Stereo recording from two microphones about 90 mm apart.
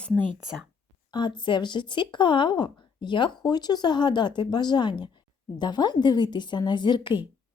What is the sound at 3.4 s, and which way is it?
Speech, 50° left (ahead or behind).